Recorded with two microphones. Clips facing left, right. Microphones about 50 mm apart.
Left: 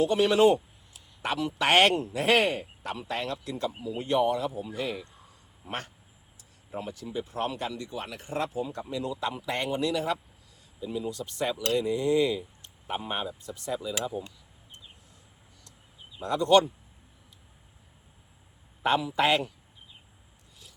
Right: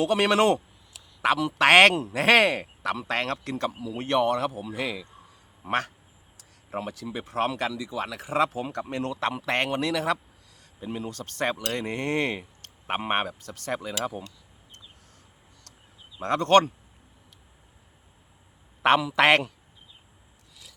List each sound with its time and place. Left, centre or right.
0.0 s a man's voice: right
6.3 s speech: right
10.8 s speech: right
16.2 s speech: right
18.8 s speech: right